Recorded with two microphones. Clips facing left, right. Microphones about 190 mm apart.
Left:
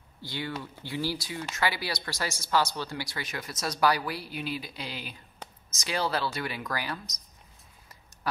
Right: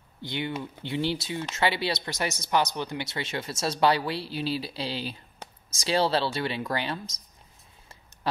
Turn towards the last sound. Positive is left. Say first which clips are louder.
# right 4 dB
turn(degrees=-25)  # may be behind; listen again after turning